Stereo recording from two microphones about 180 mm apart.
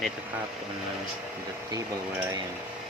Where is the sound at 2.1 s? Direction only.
15° right (ahead or behind).